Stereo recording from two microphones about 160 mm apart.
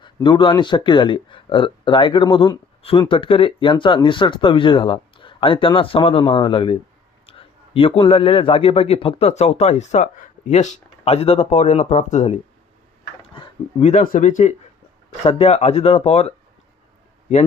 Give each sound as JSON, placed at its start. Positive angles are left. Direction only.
{"t": 0.0, "sound": "speech", "side_deg": 30}
{"t": 14.0, "sound": "speech", "side_deg": 55}
{"t": 15.2, "sound": "speech", "side_deg": 40}